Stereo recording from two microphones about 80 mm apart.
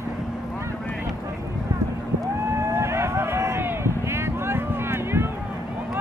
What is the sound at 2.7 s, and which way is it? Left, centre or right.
Run, right.